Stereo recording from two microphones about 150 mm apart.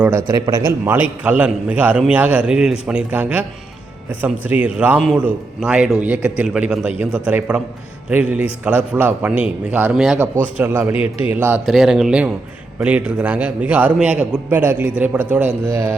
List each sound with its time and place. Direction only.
0.0 s a man's voice: 15° right (ahead or behind)
10.6 s a man's voice: 15° right (ahead or behind)